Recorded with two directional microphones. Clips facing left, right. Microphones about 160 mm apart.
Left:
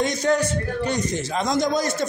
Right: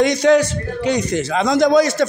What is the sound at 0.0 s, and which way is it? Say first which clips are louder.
A man's voice: right 8 dB; 85° right.